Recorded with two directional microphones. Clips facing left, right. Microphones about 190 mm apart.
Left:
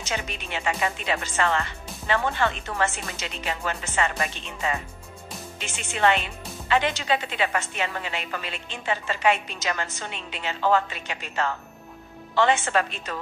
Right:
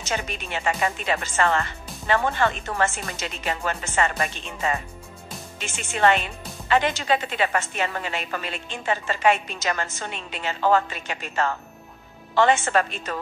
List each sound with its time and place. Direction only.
0.0 s a woman's voice: 45° right (ahead or behind)